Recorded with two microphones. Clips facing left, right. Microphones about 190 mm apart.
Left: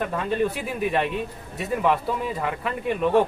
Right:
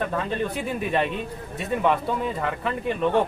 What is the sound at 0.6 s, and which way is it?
Speech, centre (ahead or behind).